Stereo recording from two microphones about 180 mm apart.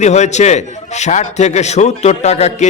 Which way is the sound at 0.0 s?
40° left (ahead or behind).